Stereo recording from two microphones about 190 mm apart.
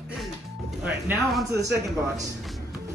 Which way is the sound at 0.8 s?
5° right (ahead or behind).